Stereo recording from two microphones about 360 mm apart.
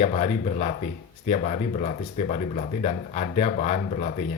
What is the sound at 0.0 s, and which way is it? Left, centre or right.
Speech, centre.